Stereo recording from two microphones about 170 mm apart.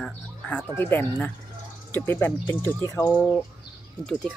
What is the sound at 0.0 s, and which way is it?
Speech, 10° left (ahead or behind).